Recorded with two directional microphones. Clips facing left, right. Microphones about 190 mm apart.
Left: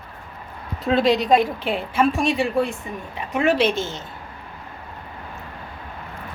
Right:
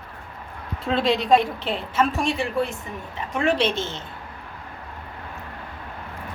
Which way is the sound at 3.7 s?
25° right (ahead or behind).